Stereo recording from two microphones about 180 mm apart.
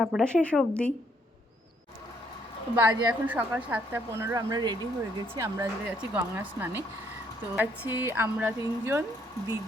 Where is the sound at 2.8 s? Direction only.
10° right (ahead or behind).